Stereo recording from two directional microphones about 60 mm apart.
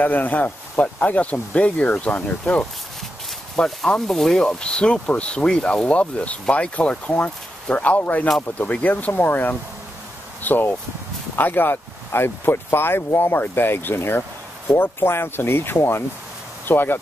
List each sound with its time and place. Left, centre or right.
0.0 s speech: left
3.5 s speech: centre; by 17.0 s left